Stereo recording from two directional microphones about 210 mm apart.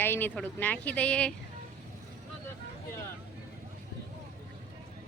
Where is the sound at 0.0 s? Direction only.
10° left (ahead or behind).